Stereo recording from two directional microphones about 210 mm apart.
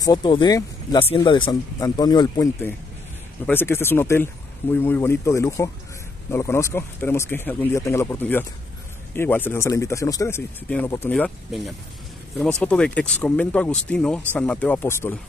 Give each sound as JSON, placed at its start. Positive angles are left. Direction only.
{"t": 0.0, "sound": "speech", "side_deg": 20}